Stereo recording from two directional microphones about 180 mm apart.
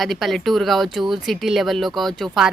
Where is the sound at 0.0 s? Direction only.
Centre (ahead or behind).